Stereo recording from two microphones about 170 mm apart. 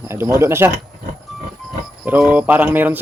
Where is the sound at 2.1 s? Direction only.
10° right (ahead or behind).